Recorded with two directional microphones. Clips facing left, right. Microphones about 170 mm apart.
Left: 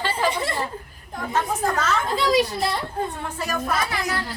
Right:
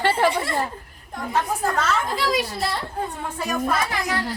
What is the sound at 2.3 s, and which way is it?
Speech, 20° left (ahead or behind).